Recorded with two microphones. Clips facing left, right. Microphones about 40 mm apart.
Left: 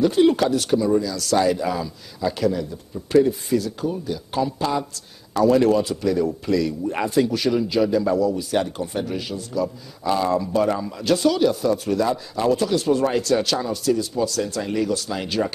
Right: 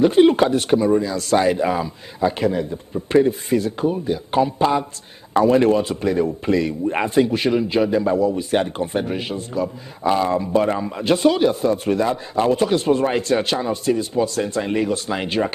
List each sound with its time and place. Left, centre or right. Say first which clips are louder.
0.0 s speech: right 3 dB; right